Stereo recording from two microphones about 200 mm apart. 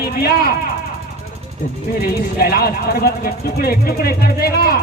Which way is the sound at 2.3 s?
50° left (ahead or behind).